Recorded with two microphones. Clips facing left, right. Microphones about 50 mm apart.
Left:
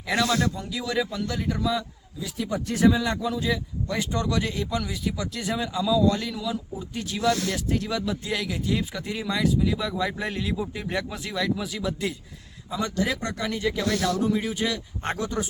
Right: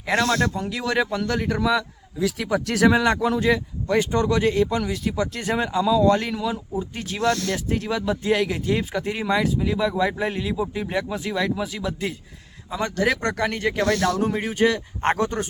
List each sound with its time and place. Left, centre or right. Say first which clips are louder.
0.0 s a man's voice: right 3 dB; right
3.8 s speech: right 7 dB; right
13.0 s speech: right 8 dB; right